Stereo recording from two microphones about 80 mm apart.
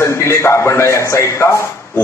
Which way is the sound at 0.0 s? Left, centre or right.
Left.